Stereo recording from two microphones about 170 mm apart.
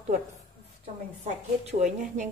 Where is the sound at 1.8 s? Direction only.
45° right (ahead or behind).